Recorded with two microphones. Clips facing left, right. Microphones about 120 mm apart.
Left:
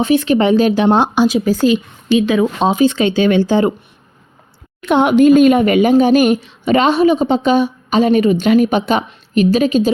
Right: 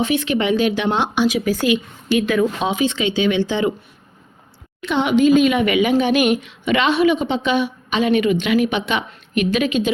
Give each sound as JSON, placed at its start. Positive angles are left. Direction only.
{"t": 0.0, "sound": "a woman's voice", "side_deg": 35}
{"t": 2.6, "sound": "speech", "side_deg": 40}
{"t": 4.8, "sound": "speech", "side_deg": 50}
{"t": 5.5, "sound": "a woman's voice", "side_deg": 40}